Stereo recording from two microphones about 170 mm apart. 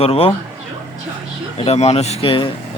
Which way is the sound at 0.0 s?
35° left (ahead or behind).